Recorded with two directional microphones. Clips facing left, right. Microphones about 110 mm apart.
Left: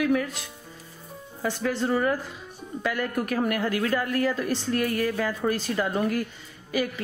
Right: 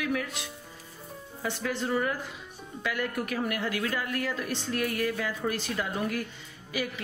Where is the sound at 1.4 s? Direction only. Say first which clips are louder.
Left 5 dB; 40° left (ahead or behind).